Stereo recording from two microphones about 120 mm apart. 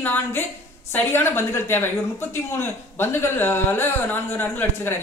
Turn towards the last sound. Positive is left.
turn(degrees=15)  # may be behind; listen again after turning